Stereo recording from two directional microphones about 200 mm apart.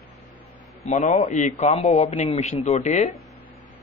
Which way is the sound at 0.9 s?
35° left (ahead or behind).